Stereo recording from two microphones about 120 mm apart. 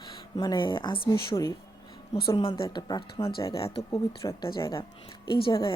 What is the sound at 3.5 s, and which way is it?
Speech, 50° left (ahead or behind).